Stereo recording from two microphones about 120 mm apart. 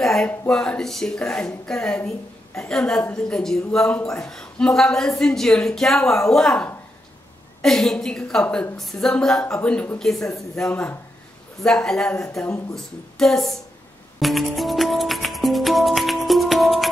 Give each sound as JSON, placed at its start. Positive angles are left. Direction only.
{"t": 0.0, "sound": "a sound", "side_deg": 5}
{"t": 0.5, "sound": "a woman's voice", "side_deg": 5}
{"t": 14.2, "sound": "music", "side_deg": 0}